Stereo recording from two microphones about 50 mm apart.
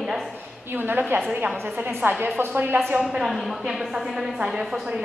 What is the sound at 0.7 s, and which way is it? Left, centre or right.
A woman's voice, right.